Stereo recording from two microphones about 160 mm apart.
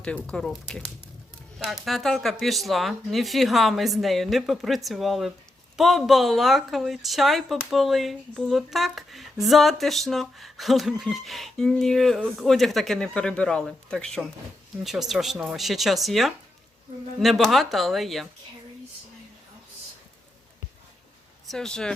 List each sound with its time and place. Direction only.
0.3 s a woman's voice: 5° left (ahead or behind)
21.5 s a woman's voice: 5° left (ahead or behind)